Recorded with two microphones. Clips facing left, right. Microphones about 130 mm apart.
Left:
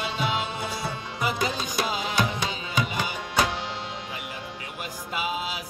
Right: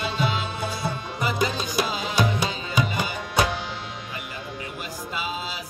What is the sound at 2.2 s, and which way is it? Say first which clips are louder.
Tabla: right 6 dB; 10° right (ahead or behind).